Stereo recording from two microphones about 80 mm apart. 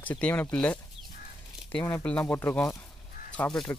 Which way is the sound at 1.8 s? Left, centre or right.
Left.